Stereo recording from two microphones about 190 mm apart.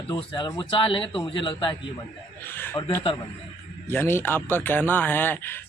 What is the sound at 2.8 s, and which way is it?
Speech, 25° left (ahead or behind).